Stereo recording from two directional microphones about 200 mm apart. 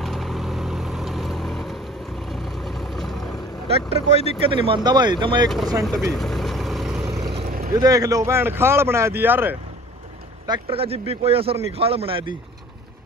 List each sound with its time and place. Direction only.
0.0 s vehicle: centre (ahead or behind)
3.6 s speech: 30° right (ahead or behind)
5.9 s vehicle: centre (ahead or behind)
7.4 s vehicle: 45° right (ahead or behind)
7.7 s speech: 20° right (ahead or behind)
10.4 s speech: 25° right (ahead or behind)